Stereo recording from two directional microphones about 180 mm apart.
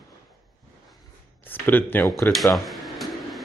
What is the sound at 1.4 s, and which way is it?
Speech, 10° left (ahead or behind).